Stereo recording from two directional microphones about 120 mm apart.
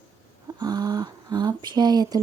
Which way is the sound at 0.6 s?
35° right (ahead or behind).